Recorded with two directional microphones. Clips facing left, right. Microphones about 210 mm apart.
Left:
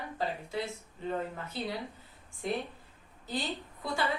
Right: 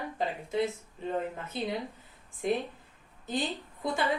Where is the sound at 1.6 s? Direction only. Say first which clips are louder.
Right 3 dB; 20° right (ahead or behind).